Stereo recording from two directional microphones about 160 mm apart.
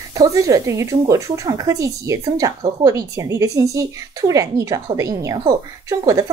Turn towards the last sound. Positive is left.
turn(degrees=-20)  # may be behind; listen again after turning